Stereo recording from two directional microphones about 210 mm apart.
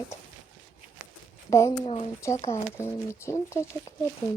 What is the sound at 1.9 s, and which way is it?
Speech, 25° left (ahead or behind).